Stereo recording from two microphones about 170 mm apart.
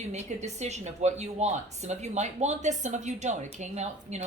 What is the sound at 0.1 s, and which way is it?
A woman's voice, 45° right (ahead or behind).